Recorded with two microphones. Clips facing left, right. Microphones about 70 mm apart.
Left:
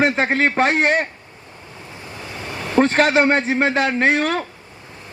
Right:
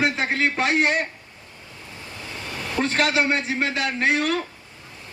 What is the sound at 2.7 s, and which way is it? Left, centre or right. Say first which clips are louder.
A man's voice: left 7 dB; left.